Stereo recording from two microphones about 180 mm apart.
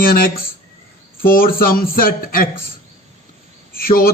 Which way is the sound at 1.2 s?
55° left (ahead or behind).